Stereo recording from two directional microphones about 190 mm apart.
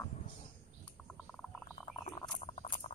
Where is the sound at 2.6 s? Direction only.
35° left (ahead or behind).